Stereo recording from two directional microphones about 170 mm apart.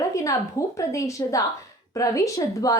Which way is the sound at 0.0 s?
20° left (ahead or behind).